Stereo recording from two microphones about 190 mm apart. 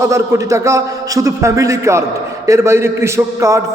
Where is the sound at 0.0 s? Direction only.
15° right (ahead or behind).